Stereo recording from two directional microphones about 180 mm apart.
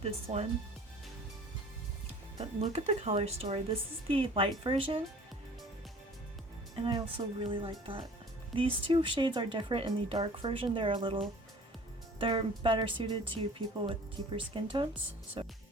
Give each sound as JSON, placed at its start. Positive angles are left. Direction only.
{"t": 0.0, "sound": "speech", "side_deg": -35}
{"t": 2.6, "sound": "speech", "side_deg": -35}
{"t": 6.7, "sound": "speech", "side_deg": -25}
{"t": 12.2, "sound": "speech", "side_deg": -30}